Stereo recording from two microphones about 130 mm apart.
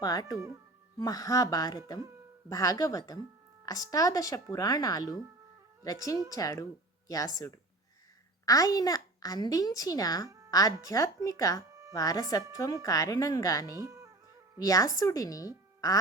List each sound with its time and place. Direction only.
0.0 s speech: 30° left (ahead or behind)
0.3 s speech: 25° right (ahead or behind)
0.9 s a woman's voice: 30° left (ahead or behind)
13.8 s music: 25° right (ahead or behind)
14.6 s a woman's voice: 25° left (ahead or behind)